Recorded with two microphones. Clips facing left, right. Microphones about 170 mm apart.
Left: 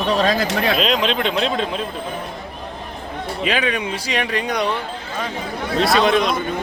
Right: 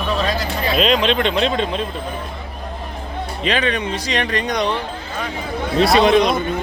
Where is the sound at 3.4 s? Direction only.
5° left (ahead or behind).